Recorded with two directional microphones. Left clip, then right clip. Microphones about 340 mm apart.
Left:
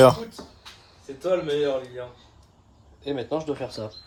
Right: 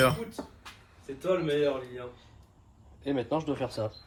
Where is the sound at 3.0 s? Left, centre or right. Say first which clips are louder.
Left 2 dB; right.